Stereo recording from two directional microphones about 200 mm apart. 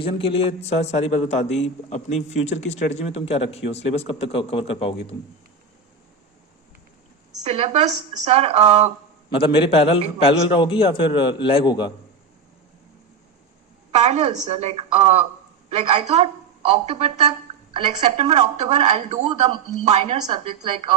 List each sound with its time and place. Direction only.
0.0 s a man's voice: 25° left (ahead or behind)
7.4 s speech: 30° right (ahead or behind)
9.3 s a man's voice: 25° left (ahead or behind)
13.9 s speech: 35° right (ahead or behind)